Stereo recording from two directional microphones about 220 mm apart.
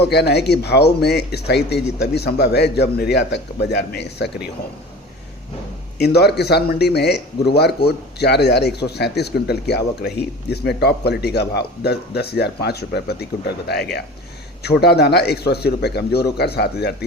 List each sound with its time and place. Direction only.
0.0 s a man's voice: 50° left (ahead or behind)
6.0 s a man's voice: 45° left (ahead or behind)
14.6 s a man's voice: 45° left (ahead or behind)